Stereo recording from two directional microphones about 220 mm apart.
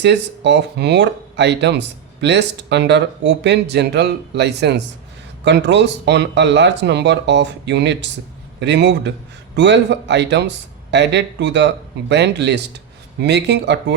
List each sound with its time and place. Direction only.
0.0 s speech: 50° right (ahead or behind)